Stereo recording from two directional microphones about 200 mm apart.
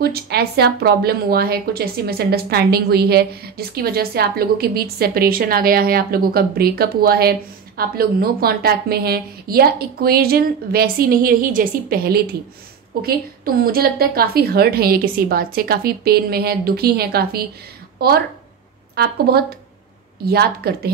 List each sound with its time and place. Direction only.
0.0 s speech: 50° right (ahead or behind)
18.9 s speech: 50° right (ahead or behind)